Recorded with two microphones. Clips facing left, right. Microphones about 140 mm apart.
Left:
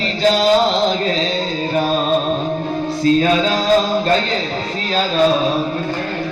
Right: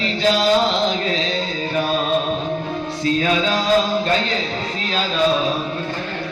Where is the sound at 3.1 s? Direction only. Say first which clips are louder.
Left 6 dB; 35° left (ahead or behind).